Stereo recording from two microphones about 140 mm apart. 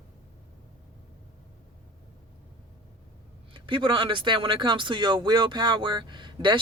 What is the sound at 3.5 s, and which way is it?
Speech, 35° right (ahead or behind).